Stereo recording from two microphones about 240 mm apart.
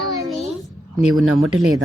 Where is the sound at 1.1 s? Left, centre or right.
Centre.